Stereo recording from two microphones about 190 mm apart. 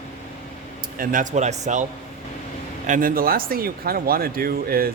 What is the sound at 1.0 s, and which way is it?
Speech, 45° right (ahead or behind).